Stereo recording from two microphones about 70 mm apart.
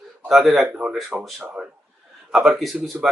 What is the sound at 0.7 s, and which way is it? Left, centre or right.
Speech, centre.